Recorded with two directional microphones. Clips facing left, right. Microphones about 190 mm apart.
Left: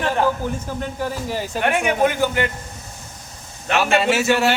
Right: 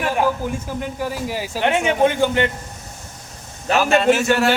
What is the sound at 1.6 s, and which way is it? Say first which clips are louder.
Speech: right 2 dB; 25° right (ahead or behind).